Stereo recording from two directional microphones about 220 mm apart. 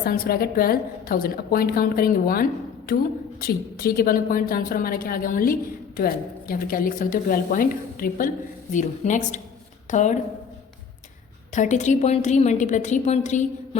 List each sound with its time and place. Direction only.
0.0 s a woman's voice: 45° left (ahead or behind)
11.5 s a woman's voice: 35° left (ahead or behind)